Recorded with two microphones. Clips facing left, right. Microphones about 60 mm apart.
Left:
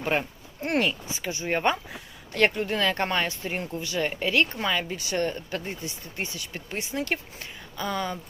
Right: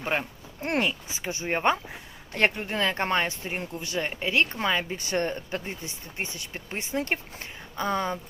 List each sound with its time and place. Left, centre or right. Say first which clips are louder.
0.0 s speech: left 2 dB; centre
1.2 s speech: even; right
1.5 s speech: even; centre
1.7 s speech: right 1 dB; right
4.5 s speech: right 1 dB; right